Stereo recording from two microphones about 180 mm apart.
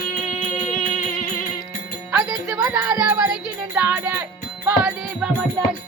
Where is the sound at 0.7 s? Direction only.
45° left (ahead or behind).